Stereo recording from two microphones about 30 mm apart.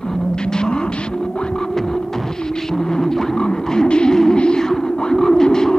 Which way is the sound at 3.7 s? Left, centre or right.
Left.